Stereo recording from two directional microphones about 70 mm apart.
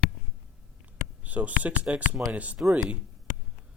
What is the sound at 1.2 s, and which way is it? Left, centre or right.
Speech, right.